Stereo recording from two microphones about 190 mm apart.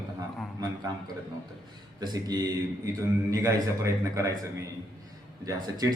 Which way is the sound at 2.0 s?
20° right (ahead or behind).